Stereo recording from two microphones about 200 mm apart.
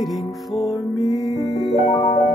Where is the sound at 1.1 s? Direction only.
Centre (ahead or behind).